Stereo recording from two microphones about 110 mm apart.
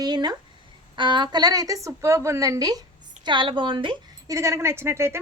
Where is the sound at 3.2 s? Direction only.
45° right (ahead or behind).